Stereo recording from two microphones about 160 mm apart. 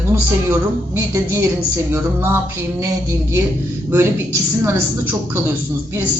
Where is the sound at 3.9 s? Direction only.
15° right (ahead or behind).